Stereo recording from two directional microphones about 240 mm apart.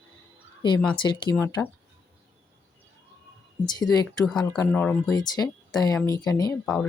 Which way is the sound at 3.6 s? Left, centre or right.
Centre.